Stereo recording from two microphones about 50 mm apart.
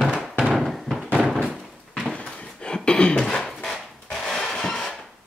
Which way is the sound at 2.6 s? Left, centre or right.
Centre.